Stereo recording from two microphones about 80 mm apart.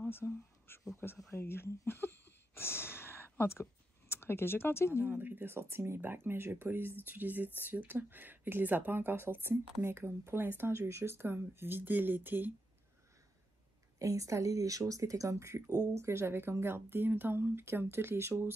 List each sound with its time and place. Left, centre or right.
0.0 s speech: left
1.3 s a sound: left
4.1 s speech: left
5.0 s speech: right
13.9 s speech: right